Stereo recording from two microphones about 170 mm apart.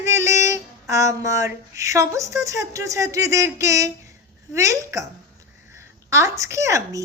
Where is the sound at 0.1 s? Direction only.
20° right (ahead or behind).